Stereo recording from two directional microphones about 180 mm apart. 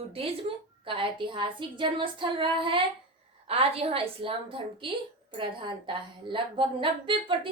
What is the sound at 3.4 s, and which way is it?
A woman's voice, 35° right (ahead or behind).